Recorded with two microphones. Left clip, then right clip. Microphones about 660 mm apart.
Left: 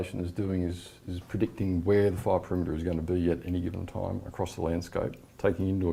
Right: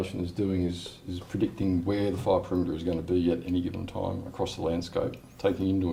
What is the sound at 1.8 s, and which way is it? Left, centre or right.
Speech, left.